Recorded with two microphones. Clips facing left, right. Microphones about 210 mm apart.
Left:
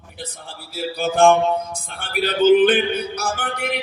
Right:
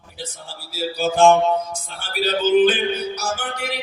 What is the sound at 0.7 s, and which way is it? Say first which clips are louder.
Music: right 1 dB; 55° left (ahead or behind).